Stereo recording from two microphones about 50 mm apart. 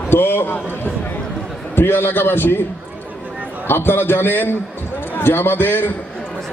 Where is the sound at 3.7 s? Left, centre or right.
Left.